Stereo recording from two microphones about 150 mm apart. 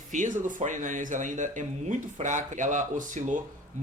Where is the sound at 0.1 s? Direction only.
60° right (ahead or behind).